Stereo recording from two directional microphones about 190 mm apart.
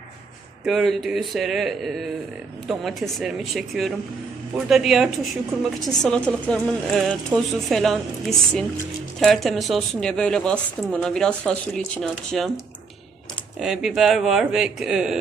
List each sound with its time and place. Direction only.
0.7 s a woman's voice: centre (ahead or behind)
13.6 s a woman's voice: centre (ahead or behind)